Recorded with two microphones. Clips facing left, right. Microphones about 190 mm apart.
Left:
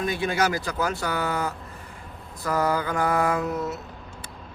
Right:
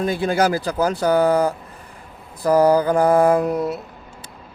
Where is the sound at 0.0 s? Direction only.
35° right (ahead or behind).